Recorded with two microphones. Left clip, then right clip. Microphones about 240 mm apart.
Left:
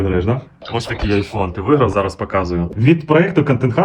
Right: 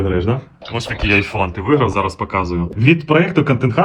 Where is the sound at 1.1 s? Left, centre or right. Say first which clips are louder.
Right 4 dB; centre.